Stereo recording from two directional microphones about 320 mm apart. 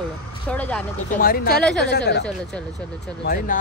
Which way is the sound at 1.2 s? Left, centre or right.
Left.